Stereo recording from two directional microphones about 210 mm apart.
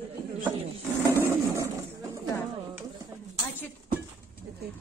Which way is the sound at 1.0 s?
15° right (ahead or behind).